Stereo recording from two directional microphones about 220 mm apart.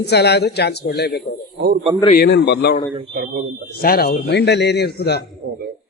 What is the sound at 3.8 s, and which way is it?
A man's voice, 45° left (ahead or behind).